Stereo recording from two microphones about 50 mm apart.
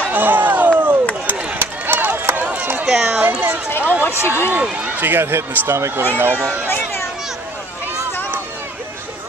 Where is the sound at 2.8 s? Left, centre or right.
Centre.